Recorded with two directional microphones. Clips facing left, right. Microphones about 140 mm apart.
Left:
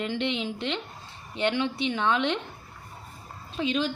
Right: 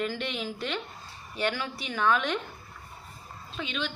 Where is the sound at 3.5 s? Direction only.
35° left (ahead or behind).